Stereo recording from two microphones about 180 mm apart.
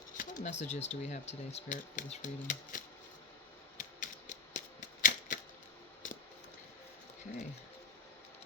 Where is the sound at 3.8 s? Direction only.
45° left (ahead or behind).